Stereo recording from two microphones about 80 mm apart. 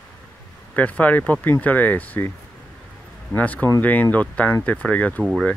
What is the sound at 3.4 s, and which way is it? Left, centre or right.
Speech, centre.